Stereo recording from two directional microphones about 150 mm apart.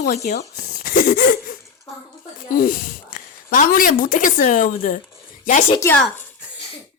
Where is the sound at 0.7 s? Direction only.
60° left (ahead or behind).